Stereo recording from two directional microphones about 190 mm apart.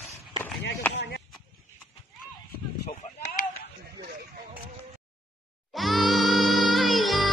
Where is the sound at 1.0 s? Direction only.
60° left (ahead or behind).